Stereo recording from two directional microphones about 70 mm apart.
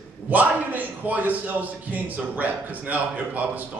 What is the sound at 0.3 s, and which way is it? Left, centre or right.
A man's voice, right.